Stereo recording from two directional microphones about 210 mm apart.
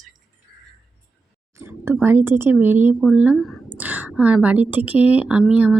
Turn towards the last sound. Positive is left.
turn(degrees=-5)  # may be behind; listen again after turning